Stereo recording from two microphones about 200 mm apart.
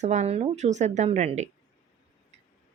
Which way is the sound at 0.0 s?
35° right (ahead or behind).